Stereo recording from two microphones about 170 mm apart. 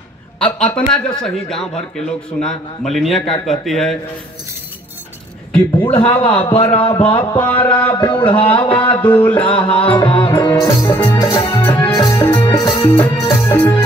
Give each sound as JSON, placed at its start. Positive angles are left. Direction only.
{"t": 0.4, "sound": "a man's voice", "side_deg": 5}
{"t": 5.5, "sound": "a man's voice", "side_deg": 10}
{"t": 5.9, "sound": "music", "side_deg": 30}
{"t": 6.7, "sound": "a sound", "side_deg": 30}
{"t": 7.3, "sound": "music", "side_deg": 10}
{"t": 7.9, "sound": "music", "side_deg": 25}
{"t": 8.8, "sound": "music", "side_deg": 10}
{"t": 9.8, "sound": "music", "side_deg": 30}
{"t": 10.6, "sound": "music", "side_deg": 15}
{"t": 12.4, "sound": "music", "side_deg": 25}
{"t": 13.2, "sound": "music", "side_deg": 15}